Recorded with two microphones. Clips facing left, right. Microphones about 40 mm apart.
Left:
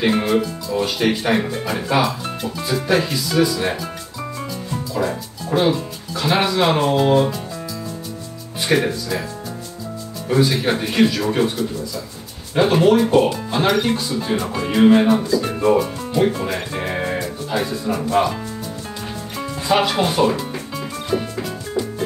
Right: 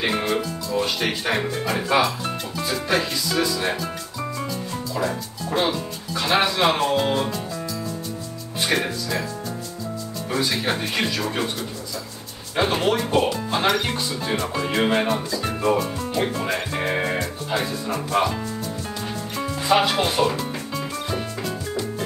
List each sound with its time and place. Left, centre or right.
0.0 s speech: centre
5.5 s speech: centre
8.6 s speech: centre
10.4 s speech: centre
17.6 s speech: centre
19.7 s music: centre